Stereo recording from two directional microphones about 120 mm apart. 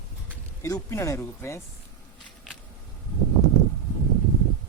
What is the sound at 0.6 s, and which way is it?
Speech, 25° left (ahead or behind).